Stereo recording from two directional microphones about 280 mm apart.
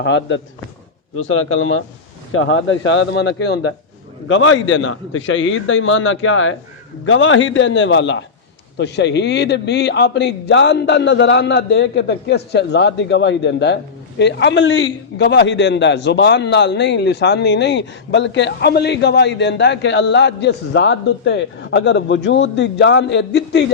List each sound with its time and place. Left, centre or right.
0.0 s a man's voice: left